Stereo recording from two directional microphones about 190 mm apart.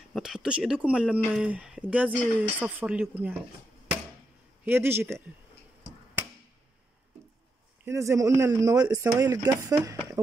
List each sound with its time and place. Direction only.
0.1 s speech: 5° right (ahead or behind)
4.6 s speech: 10° right (ahead or behind)
7.8 s speech: 15° right (ahead or behind)